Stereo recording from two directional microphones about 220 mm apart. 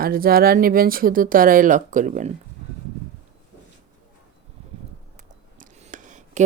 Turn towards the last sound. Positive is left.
turn(degrees=-35)  # may be behind; listen again after turning